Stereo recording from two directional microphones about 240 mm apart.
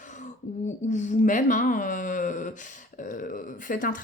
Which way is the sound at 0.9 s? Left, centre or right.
Left.